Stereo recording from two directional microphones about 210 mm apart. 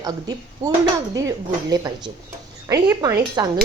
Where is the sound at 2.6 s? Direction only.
15° right (ahead or behind).